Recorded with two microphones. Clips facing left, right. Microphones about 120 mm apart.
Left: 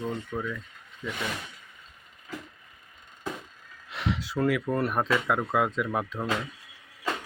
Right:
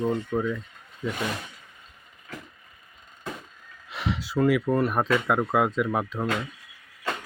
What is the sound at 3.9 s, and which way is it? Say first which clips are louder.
Speech: right 2 dB; centre (ahead or behind).